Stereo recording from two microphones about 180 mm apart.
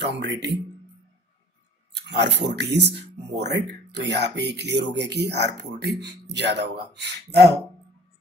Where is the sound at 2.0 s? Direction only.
70° right (ahead or behind).